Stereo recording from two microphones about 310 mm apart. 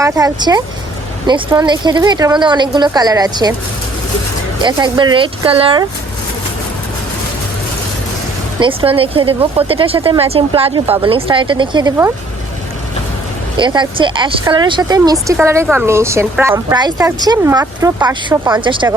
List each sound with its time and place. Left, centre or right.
0.0 s speech: centre
4.6 s speech: centre
8.6 s speech: centre
13.6 s speech: centre